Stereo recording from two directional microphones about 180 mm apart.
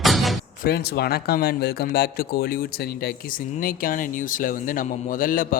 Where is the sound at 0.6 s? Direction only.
60° left (ahead or behind).